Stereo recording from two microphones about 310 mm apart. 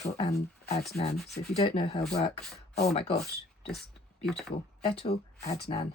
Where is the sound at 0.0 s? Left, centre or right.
Centre.